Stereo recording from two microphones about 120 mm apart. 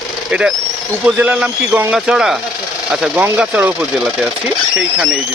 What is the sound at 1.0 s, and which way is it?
Speech, 10° right (ahead or behind).